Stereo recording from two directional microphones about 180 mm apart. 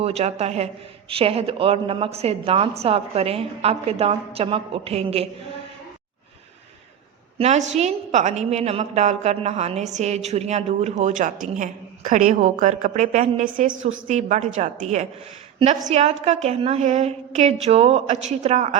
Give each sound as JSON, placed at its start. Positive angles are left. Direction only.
{"t": 0.0, "sound": "a woman's voice", "side_deg": -35}
{"t": 7.3, "sound": "a woman's voice", "side_deg": -35}